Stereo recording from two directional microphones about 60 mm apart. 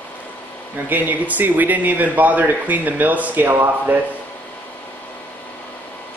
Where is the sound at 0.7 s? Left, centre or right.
Right.